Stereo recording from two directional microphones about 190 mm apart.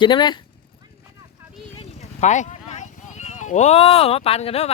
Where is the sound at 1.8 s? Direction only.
40° left (ahead or behind).